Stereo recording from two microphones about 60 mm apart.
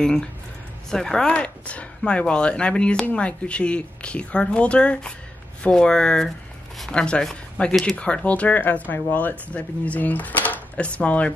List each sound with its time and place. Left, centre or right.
0.0 s speech: centre